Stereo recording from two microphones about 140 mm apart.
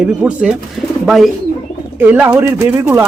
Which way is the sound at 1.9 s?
15° right (ahead or behind).